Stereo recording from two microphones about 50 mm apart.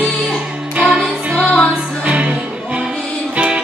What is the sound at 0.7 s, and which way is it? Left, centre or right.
Music, right.